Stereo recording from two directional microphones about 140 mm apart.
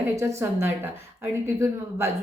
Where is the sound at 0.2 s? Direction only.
20° right (ahead or behind).